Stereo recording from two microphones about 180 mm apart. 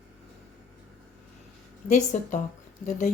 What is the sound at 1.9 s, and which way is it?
Speech, 45° left (ahead or behind).